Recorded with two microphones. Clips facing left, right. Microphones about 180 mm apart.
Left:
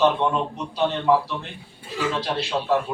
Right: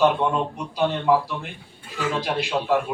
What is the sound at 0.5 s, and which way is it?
A man's voice, 10° right (ahead or behind).